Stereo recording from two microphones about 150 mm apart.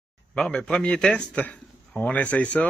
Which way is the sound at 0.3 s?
5° left (ahead or behind).